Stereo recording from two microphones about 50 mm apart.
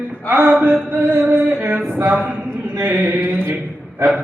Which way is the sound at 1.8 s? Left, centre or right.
Right.